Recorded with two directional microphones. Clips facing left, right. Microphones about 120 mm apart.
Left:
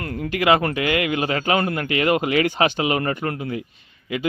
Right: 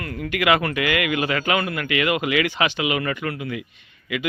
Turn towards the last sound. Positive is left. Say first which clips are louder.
# left 1 dB
turn(degrees=35)  # may be behind; listen again after turning